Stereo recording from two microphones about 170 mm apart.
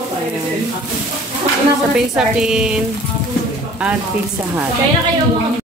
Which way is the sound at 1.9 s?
5° right (ahead or behind).